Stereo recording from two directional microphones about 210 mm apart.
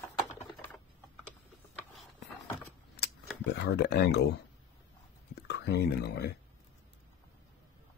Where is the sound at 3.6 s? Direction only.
55° left (ahead or behind).